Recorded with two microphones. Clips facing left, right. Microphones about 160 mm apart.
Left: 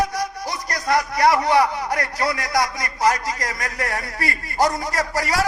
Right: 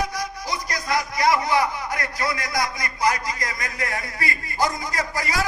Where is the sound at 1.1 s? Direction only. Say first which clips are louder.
Left 3 dB; 65° left (ahead or behind).